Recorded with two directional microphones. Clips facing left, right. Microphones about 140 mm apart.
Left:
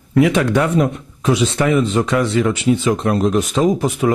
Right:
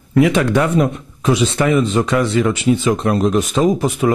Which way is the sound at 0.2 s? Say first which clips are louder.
Right 1 dB; 20° right (ahead or behind).